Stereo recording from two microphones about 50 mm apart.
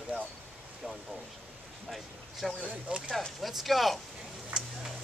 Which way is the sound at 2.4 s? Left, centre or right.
Centre.